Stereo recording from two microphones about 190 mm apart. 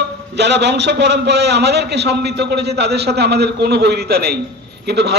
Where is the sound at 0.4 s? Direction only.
65° right (ahead or behind).